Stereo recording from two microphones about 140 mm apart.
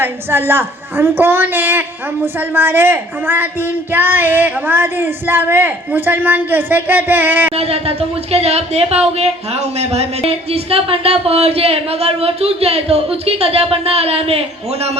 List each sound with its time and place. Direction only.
0.0 s a woman's voice: 15° right (ahead or behind)
7.5 s speech: 45° right (ahead or behind)